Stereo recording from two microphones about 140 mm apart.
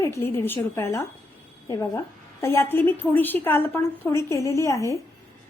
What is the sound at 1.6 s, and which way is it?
Female singing, 20° left (ahead or behind).